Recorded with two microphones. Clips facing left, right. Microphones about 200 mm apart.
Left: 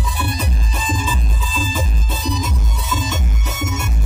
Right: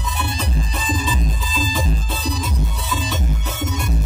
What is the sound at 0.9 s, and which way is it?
Music, 40° right (ahead or behind).